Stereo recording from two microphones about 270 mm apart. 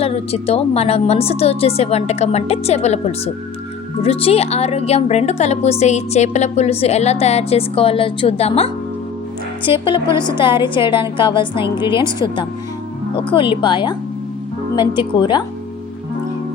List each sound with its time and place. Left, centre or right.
0.0 s a woman's voice: left